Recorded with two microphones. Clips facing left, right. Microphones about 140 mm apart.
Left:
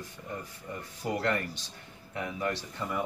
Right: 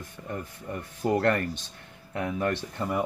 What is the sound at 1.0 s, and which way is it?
Speech, 40° right (ahead or behind).